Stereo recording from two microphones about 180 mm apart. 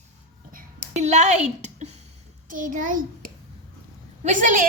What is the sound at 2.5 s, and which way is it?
Speech, 45° right (ahead or behind).